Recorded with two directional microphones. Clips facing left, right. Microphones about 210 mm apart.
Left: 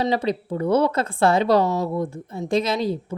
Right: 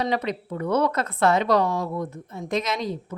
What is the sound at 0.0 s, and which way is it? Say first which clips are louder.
A woman's voice: left 3 dB; 30° left (ahead or behind).